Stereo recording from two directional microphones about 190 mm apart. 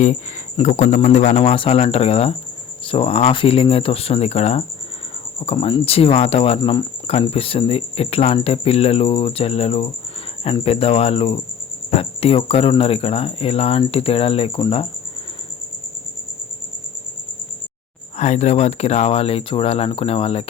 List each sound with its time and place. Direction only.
0.0 s speech: 40° left (ahead or behind)
18.2 s speech: 35° left (ahead or behind)